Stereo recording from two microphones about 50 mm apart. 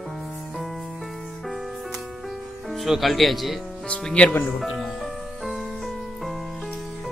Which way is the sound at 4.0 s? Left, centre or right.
Centre.